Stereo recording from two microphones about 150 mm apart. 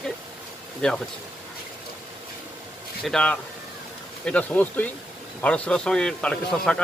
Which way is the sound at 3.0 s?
5° left (ahead or behind).